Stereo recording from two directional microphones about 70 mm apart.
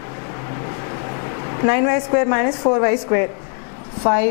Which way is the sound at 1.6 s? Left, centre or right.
Centre.